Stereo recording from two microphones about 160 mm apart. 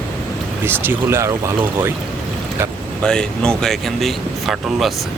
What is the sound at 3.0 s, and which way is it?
Speech, 5° left (ahead or behind).